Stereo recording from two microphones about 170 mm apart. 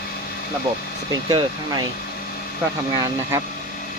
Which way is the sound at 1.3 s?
25° right (ahead or behind).